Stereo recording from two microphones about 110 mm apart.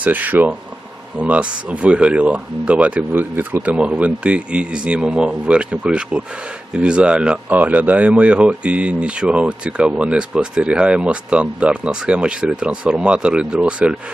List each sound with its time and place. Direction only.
0.0 s speech: 15° right (ahead or behind)